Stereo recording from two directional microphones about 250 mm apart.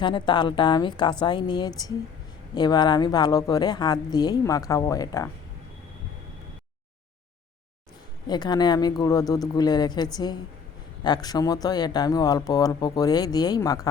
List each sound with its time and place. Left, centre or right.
0.0 s speech: centre
8.3 s speech: centre